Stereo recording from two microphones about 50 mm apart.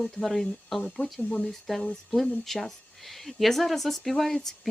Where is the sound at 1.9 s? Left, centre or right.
Centre.